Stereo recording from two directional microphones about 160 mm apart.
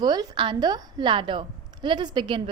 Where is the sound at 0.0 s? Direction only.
25° right (ahead or behind).